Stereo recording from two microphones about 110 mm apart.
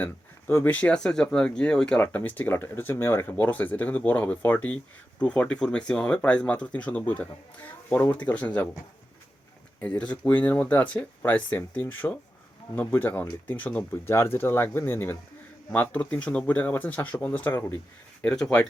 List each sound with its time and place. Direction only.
0.0 s speech: 15° left (ahead or behind)
9.8 s speech: 15° left (ahead or behind)
18.2 s speech: 5° left (ahead or behind)